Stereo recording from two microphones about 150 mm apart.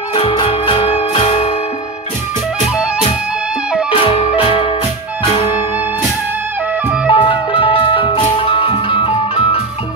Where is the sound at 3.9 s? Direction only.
40° left (ahead or behind).